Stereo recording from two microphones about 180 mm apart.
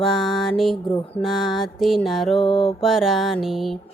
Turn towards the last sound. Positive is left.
turn(degrees=0)  # may be behind; listen again after turning